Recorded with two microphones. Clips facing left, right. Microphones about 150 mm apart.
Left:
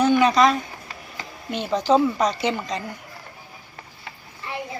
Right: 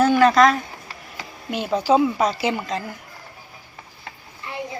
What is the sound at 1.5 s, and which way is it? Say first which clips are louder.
A woman's voice: right 1 dB; 5° right (ahead or behind).